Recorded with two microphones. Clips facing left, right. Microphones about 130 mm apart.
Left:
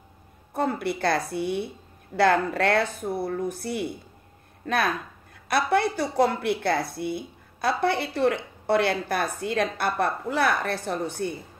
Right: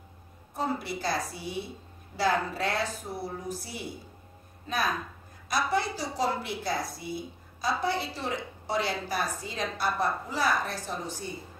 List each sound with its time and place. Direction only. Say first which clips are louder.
0.6 s a woman's voice: left 5 dB; 55° left (ahead or behind)